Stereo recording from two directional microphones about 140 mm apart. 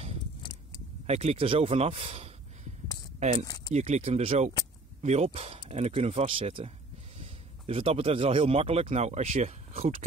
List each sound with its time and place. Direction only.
1.0 s speech: 50° right (ahead or behind)
3.4 s speech: 25° left (ahead or behind)
3.7 s speech: 50° right (ahead or behind)